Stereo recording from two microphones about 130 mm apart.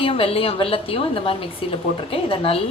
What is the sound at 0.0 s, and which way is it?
A woman's voice, 45° left (ahead or behind).